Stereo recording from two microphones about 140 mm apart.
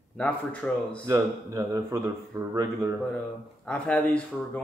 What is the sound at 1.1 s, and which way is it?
Speech, 25° right (ahead or behind).